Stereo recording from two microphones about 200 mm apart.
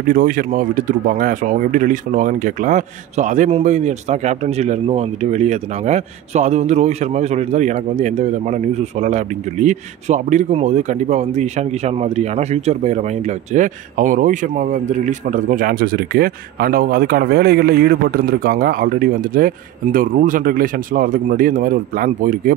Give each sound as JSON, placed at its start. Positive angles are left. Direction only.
{"t": 0.1, "sound": "speech", "side_deg": -45}